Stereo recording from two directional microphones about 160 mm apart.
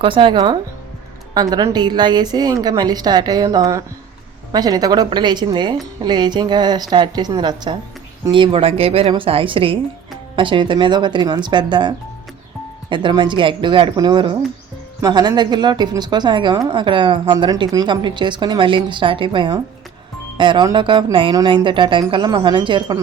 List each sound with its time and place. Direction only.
0.0 s a woman's voice: 30° right (ahead or behind)